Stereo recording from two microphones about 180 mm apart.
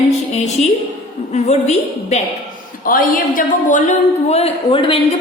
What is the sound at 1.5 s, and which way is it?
A man's voice, 40° left (ahead or behind).